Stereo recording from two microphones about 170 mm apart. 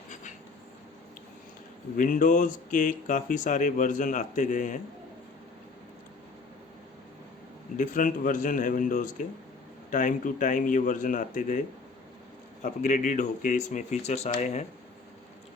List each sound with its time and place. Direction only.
0.1 s a sound: 45° left (ahead or behind)
2.0 s speech: 50° left (ahead or behind)
7.8 s speech: 50° left (ahead or behind)
12.6 s speech: 50° left (ahead or behind)